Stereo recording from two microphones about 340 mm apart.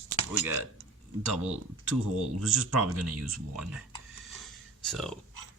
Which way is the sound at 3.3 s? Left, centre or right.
Centre.